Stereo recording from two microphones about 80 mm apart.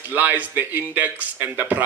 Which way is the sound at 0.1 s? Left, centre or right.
Right.